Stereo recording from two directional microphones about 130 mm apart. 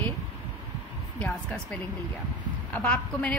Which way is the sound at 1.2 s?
10° left (ahead or behind).